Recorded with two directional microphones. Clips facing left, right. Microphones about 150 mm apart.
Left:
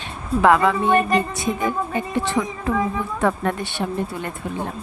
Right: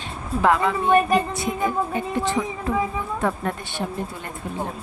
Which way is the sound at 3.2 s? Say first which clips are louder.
Left 4 dB; 85° left.